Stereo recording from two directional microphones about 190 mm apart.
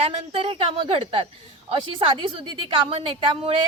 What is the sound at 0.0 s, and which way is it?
A woman's voice, 30° right (ahead or behind).